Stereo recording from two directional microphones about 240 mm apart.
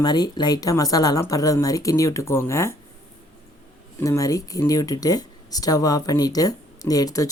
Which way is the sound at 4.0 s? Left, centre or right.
Centre.